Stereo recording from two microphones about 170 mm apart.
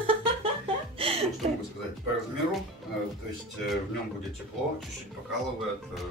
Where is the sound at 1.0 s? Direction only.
35° right (ahead or behind).